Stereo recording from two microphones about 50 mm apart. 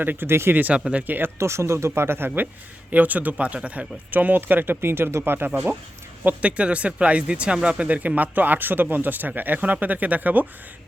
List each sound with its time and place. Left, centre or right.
0.0 s speech: right
0.5 s speech: right
1.4 s speech: right
2.9 s speech: right
4.1 s speech: right
6.2 s speech: right